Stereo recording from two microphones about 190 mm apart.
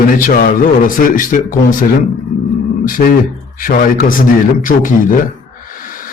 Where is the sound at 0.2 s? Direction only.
45° left (ahead or behind).